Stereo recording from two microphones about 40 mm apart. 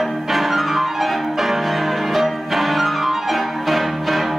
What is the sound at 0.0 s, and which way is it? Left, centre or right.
Music, centre.